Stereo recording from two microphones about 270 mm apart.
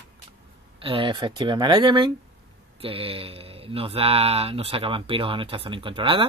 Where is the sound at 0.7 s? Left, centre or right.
Centre.